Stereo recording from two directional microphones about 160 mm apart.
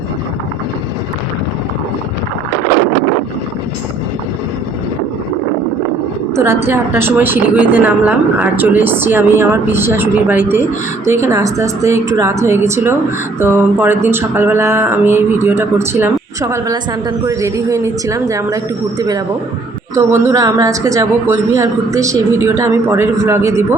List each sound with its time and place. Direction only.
6.3 s a woman's voice: 15° right (ahead or behind)